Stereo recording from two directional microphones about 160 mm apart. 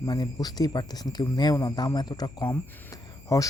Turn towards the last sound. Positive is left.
turn(degrees=20)  # may be behind; listen again after turning